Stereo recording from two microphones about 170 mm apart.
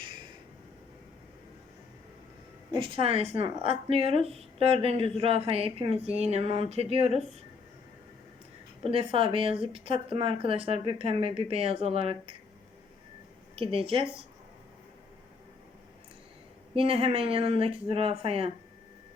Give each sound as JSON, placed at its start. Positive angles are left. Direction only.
{"t": 2.7, "sound": "speech", "side_deg": -30}
{"t": 8.8, "sound": "speech", "side_deg": -35}
{"t": 13.6, "sound": "speech", "side_deg": -35}
{"t": 16.7, "sound": "speech", "side_deg": -35}